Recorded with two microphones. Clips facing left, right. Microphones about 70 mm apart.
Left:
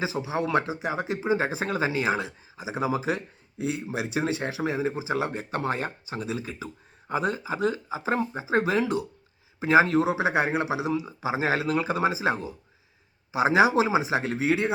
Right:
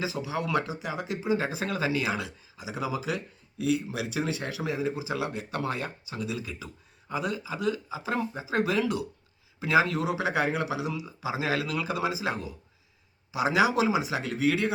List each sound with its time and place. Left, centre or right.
0.0 s speech: left